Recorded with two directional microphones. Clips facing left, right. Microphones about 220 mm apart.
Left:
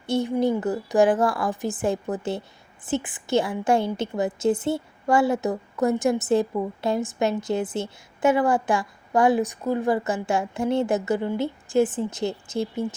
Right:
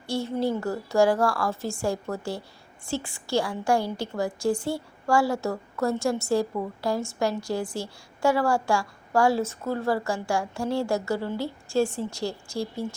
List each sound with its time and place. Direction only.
0.0 s a woman's voice: 20° left (ahead or behind)